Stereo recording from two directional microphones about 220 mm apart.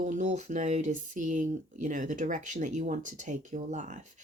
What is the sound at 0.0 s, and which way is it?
Speech, 35° right (ahead or behind).